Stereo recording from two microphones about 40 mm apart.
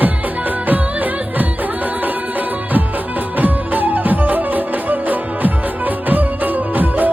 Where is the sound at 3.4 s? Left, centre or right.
Right.